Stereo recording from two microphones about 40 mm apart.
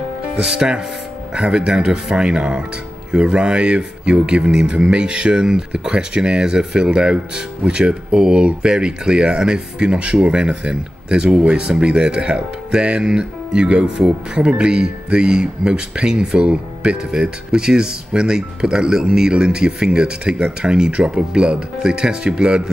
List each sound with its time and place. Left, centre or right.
0.4 s speech: right